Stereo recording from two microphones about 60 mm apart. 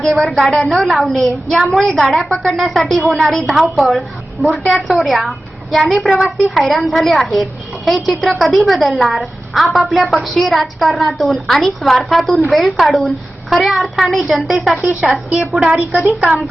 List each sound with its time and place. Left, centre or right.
0.0 s a woman's voice: centre
15.6 s a woman's voice: centre